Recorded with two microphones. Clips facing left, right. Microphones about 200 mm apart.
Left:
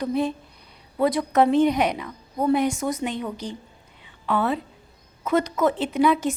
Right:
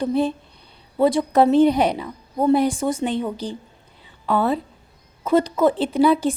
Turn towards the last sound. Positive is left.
turn(degrees=-35)  # may be behind; listen again after turning